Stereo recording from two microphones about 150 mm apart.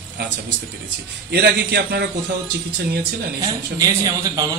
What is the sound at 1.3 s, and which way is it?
Speech, 90° right.